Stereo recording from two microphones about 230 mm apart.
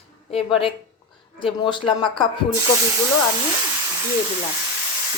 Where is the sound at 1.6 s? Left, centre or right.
Left.